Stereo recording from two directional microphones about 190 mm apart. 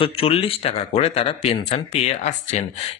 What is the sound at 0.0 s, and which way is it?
Speech, 30° left (ahead or behind).